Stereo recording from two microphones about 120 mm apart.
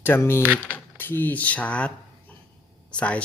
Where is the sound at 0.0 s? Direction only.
20° left (ahead or behind).